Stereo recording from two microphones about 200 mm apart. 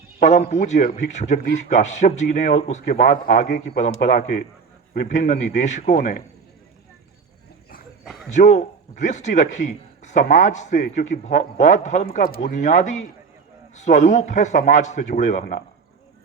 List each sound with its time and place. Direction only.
0.2 s a man's voice: 35° left (ahead or behind)
8.3 s a man's voice: 35° left (ahead or behind)